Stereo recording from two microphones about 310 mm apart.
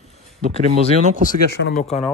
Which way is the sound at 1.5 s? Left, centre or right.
Left.